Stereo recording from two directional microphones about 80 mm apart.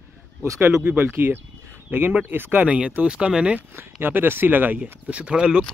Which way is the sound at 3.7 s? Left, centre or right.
Right.